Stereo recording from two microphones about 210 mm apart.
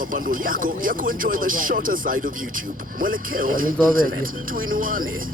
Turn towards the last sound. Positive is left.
turn(degrees=-40)  # may be behind; listen again after turning